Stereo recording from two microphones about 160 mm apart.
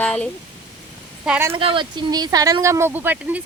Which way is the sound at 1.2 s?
10° right (ahead or behind).